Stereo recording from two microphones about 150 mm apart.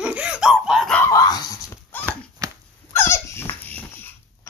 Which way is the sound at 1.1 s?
25° left (ahead or behind).